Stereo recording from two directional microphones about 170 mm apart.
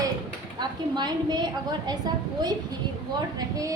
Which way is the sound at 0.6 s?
25° right (ahead or behind).